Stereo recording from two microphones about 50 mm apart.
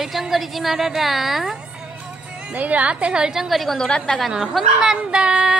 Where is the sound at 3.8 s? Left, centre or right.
Centre.